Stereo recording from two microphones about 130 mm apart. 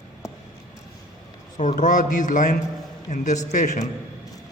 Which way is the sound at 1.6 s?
75° left (ahead or behind).